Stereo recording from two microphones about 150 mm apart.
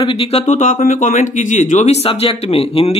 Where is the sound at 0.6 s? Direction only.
55° left (ahead or behind).